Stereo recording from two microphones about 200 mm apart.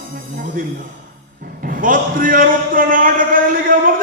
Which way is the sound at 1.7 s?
45° right (ahead or behind).